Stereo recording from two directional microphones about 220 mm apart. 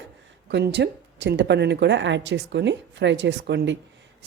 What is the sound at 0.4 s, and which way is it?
A woman's voice, 50° right (ahead or behind).